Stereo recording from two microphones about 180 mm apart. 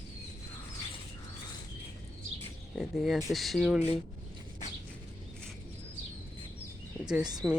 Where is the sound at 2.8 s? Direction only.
Centre (ahead or behind).